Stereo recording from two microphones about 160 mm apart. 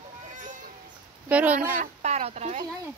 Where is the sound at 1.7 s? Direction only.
50° right (ahead or behind).